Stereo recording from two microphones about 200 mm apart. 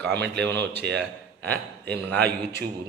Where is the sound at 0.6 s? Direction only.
55° right (ahead or behind).